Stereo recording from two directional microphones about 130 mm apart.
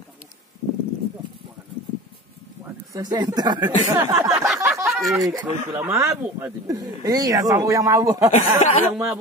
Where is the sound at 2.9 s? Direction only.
30° right (ahead or behind).